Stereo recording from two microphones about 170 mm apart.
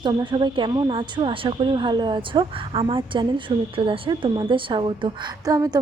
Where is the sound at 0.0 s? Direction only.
30° right (ahead or behind).